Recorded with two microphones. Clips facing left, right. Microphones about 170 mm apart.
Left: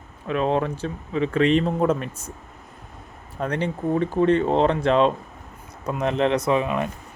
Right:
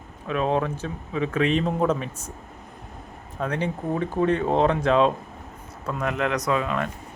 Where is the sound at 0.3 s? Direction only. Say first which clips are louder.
Left 1 dB; 10° right (ahead or behind).